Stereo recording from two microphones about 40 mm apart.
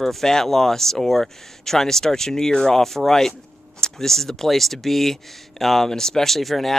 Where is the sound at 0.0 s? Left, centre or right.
Centre.